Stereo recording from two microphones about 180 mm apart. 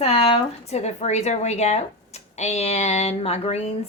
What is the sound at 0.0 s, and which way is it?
A woman's voice, 35° left (ahead or behind).